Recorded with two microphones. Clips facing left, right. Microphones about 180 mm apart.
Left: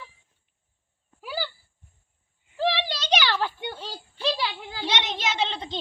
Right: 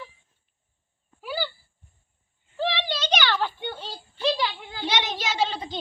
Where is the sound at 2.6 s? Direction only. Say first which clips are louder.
Left 1 dB; 5° left (ahead or behind).